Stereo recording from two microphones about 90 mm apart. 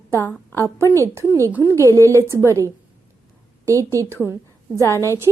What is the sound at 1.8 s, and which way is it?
Speech, 35° right (ahead or behind).